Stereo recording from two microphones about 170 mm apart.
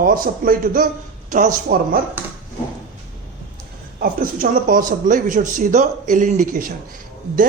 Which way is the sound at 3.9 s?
55° right (ahead or behind).